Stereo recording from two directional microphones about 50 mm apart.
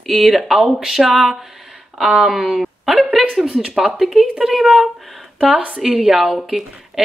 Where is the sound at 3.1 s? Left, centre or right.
Centre.